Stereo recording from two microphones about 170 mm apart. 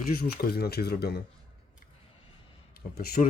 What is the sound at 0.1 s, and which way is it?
Speech, 60° left (ahead or behind).